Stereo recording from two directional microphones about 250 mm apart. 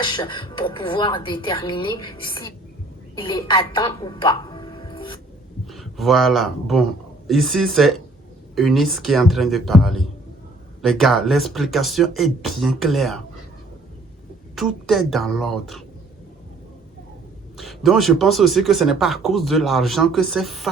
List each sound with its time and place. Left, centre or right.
0.0 s a woman's voice: centre
5.6 s speech: centre
14.5 s speech: centre
17.6 s speech: centre